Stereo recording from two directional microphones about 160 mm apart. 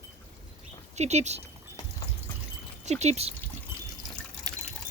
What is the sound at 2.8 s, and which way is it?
Speech, 45° right (ahead or behind).